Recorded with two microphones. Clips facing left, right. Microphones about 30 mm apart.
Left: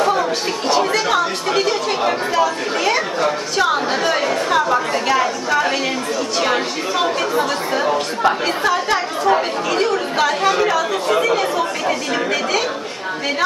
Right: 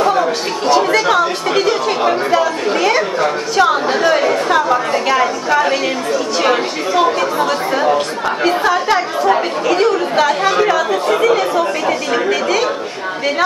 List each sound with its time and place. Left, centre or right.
0.0 s chatter: centre
6.5 s a woman's voice: centre